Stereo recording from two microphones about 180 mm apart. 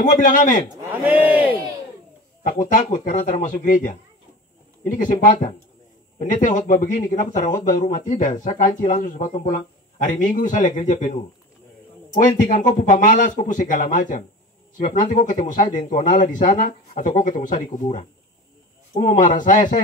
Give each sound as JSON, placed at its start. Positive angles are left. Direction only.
{"t": 0.0, "sound": "speech", "side_deg": 45}
{"t": 1.0, "sound": "a man's voice", "side_deg": -10}
{"t": 2.6, "sound": "speech", "side_deg": 45}
{"t": 12.2, "sound": "speech", "side_deg": 45}
{"t": 18.9, "sound": "speech", "side_deg": 45}